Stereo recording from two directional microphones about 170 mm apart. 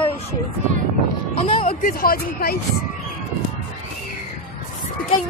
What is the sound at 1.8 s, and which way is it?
Speech, 55° left (ahead or behind).